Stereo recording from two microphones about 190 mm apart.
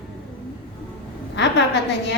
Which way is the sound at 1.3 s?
65° left (ahead or behind).